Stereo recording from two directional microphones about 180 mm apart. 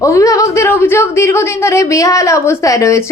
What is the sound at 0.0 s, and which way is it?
A woman's voice, 15° left (ahead or behind).